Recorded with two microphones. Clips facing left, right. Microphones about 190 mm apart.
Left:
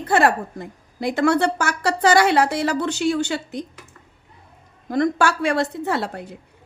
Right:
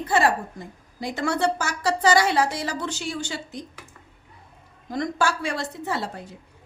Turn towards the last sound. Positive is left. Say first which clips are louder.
# left 5 dB
turn(degrees=65)  # may be behind; listen again after turning